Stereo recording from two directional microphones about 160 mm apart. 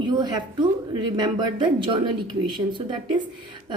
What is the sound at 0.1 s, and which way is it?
A woman's voice, 25° right (ahead or behind).